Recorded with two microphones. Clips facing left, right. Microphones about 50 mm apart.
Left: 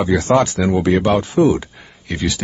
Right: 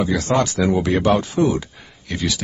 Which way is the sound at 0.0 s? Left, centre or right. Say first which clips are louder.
Left 4 dB; left.